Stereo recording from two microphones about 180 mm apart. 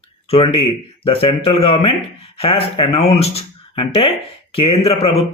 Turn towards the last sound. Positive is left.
turn(degrees=35)  # may be behind; listen again after turning